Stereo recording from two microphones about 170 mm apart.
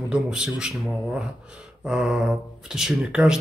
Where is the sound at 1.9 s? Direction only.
5° right (ahead or behind).